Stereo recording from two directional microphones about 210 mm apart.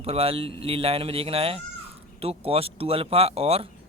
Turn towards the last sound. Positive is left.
turn(degrees=-30)  # may be behind; listen again after turning